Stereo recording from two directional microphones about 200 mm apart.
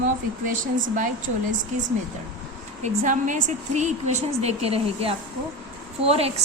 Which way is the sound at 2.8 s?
40° right (ahead or behind).